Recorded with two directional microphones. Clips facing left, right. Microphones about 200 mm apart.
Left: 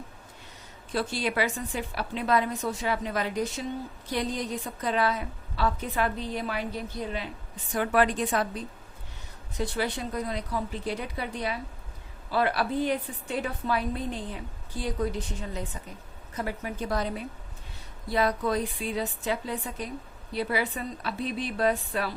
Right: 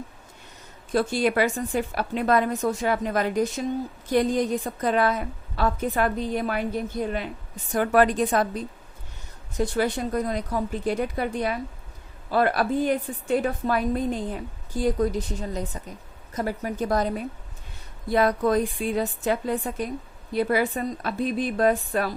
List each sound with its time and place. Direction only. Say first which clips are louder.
0.9 s a woman's voice: right 6 dB; 50° right (ahead or behind)